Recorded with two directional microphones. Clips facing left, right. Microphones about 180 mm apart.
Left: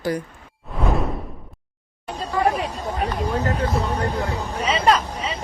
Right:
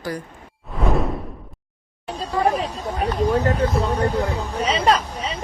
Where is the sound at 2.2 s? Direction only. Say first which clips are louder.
Right 1 dB; 30° right (ahead or behind).